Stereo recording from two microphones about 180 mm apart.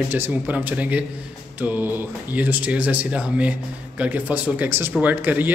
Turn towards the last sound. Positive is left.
turn(degrees=-10)  # may be behind; listen again after turning